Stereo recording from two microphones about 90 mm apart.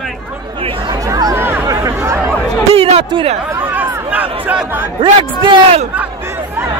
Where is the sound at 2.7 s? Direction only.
90° right.